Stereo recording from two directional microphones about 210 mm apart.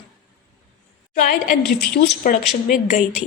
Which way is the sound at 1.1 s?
40° left (ahead or behind).